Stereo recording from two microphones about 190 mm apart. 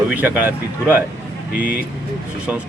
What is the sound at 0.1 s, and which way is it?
Speech, 10° right (ahead or behind).